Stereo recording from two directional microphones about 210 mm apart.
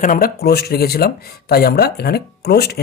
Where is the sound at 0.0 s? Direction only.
45° left (ahead or behind).